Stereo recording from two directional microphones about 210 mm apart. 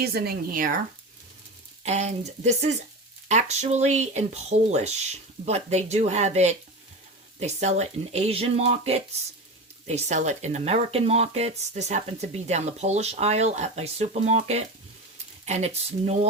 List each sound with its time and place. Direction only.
0.0 s speech: 50° right (ahead or behind)
1.8 s speech: 30° right (ahead or behind)